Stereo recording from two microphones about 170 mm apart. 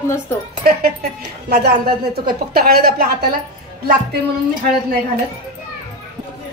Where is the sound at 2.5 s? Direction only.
65° right (ahead or behind).